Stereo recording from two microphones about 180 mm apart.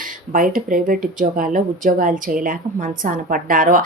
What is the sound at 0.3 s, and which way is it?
A woman's voice, 50° right (ahead or behind).